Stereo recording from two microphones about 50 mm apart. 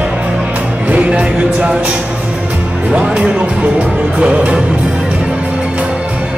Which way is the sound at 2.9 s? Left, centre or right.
Right.